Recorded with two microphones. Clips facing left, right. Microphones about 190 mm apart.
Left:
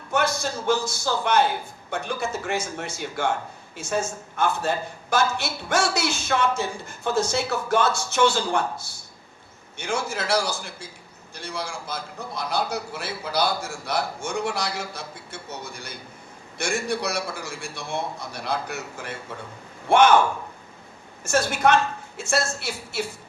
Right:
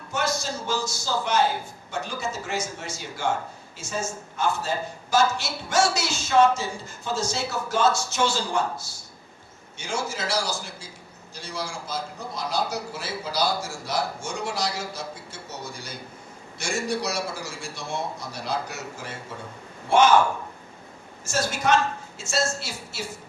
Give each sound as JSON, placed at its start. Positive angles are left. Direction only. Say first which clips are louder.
{"t": 0.1, "sound": "a woman's voice", "louder": "left 3 dB", "side_deg": 55}
{"t": 21.2, "sound": "a woman's voice", "louder": "left 3 dB", "side_deg": 55}